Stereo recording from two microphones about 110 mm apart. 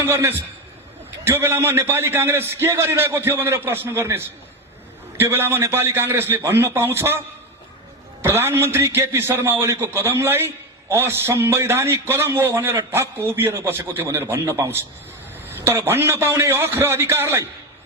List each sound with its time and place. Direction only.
0.0 s a man's voice: 25° right (ahead or behind)
8.2 s a man's voice: 20° right (ahead or behind)